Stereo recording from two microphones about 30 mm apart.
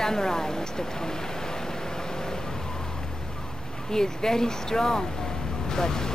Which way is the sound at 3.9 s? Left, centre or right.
Left.